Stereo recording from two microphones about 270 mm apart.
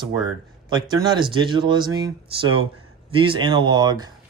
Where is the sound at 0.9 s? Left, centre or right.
Centre.